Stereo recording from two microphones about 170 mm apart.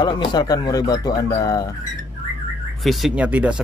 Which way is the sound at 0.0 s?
25° left (ahead or behind).